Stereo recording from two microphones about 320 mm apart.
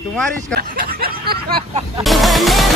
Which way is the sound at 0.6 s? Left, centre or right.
Right.